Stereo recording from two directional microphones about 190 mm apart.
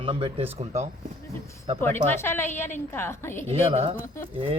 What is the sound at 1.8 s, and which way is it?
A woman's voice, 10° left (ahead or behind).